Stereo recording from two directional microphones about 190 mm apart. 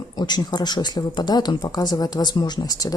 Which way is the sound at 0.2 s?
20° left (ahead or behind).